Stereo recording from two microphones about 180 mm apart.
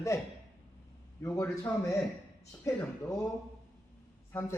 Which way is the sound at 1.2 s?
15° left (ahead or behind).